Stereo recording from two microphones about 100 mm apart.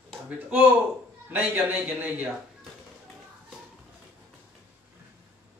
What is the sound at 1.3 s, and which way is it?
Speech, 15° right (ahead or behind).